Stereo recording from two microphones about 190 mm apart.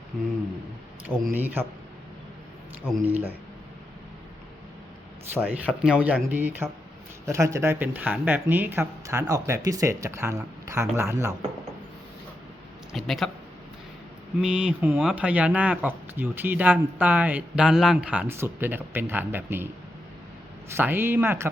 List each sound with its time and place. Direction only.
1.3 s speech: 10° right (ahead or behind)
3.1 s speech: 10° right (ahead or behind)
5.3 s speech: 10° right (ahead or behind)
12.9 s speech: centre (ahead or behind)
14.4 s speech: 5° right (ahead or behind)
20.7 s speech: 10° right (ahead or behind)